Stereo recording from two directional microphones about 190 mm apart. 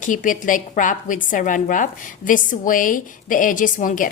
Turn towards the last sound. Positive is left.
turn(degrees=45)  # may be behind; listen again after turning